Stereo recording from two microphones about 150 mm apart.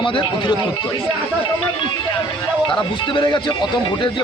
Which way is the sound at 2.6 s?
30° left (ahead or behind).